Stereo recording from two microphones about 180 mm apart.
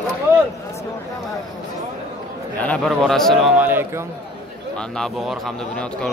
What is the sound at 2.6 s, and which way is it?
Speech, 5° left (ahead or behind).